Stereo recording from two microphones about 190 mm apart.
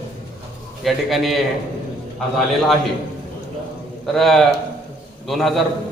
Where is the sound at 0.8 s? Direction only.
Centre (ahead or behind).